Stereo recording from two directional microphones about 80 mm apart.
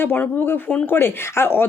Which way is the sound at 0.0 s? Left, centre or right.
Left.